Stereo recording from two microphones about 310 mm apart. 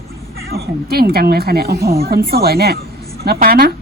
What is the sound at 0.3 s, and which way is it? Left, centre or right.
A woman's voice, right.